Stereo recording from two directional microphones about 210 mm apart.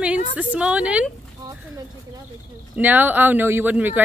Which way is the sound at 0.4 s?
5° right (ahead or behind).